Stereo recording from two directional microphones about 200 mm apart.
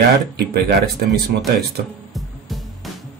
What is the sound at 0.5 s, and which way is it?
Speech, 50° right (ahead or behind).